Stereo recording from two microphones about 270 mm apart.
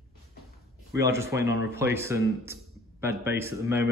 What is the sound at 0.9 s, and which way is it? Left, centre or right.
Speech, centre.